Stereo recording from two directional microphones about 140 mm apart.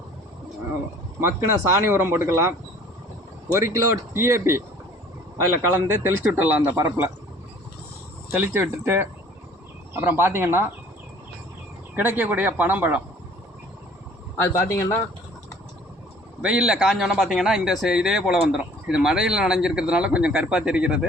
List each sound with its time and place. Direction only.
1.2 s speech: 20° right (ahead or behind)
3.5 s speech: 20° right (ahead or behind)
5.7 s speech: 15° right (ahead or behind)
8.3 s speech: 15° right (ahead or behind)
11.9 s speech: 10° right (ahead or behind)
14.3 s speech: 20° left (ahead or behind)
16.4 s a man's voice: 5° right (ahead or behind)